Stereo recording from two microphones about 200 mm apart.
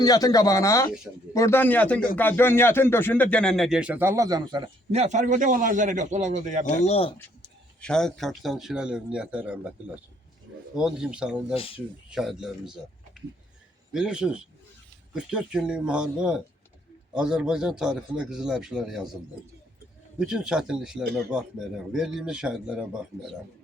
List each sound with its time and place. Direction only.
0.0 s speech: 20° left (ahead or behind); by 6.7 s 35° right (ahead or behind)
6.7 s speech: 35° left (ahead or behind)
7.8 s speech: 5° left (ahead or behind)
10.8 s speech: 5° right (ahead or behind)
11.5 s speech: 30° left (ahead or behind)
12.1 s speech: centre (ahead or behind)
13.9 s speech: 5° right (ahead or behind)
20.1 s speech: 5° right (ahead or behind)